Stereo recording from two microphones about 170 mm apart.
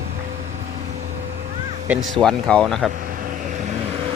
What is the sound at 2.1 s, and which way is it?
Speech, 5° left (ahead or behind).